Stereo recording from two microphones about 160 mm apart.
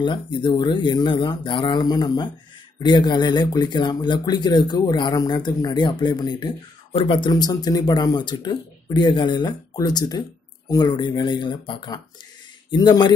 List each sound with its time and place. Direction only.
0.0 s speech: 30° left (ahead or behind)